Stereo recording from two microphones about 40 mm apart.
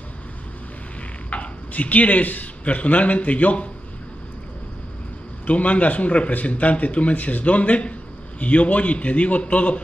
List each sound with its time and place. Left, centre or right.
1.3 s speech: left
5.5 s a man's voice: left